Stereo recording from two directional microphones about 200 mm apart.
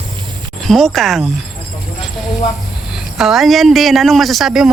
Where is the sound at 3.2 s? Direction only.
Centre (ahead or behind).